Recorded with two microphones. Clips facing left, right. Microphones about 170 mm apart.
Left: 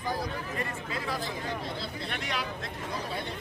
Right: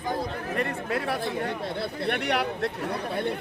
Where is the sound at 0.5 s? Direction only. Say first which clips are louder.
Right 7 dB; 65° right (ahead or behind).